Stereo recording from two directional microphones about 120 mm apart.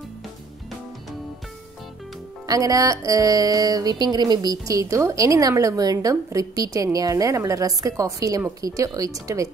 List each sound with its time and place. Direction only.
2.4 s music: 30° right (ahead or behind)